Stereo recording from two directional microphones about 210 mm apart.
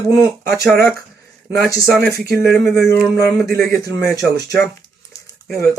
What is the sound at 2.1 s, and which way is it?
Speech, 50° right (ahead or behind).